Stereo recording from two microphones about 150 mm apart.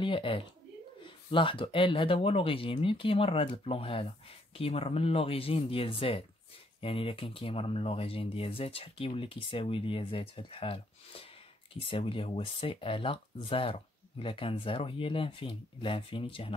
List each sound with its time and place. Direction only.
0.0 s speech: 35° left (ahead or behind)